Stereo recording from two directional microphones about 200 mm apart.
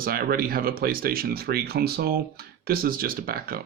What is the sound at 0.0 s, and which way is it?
Speech, 50° right (ahead or behind).